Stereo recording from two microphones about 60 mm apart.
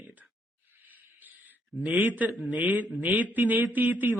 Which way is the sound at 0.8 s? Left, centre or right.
Right.